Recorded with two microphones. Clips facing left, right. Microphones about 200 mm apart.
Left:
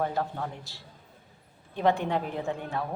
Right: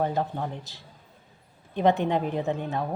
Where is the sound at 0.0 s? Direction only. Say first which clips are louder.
Right 3 dB; 20° right (ahead or behind).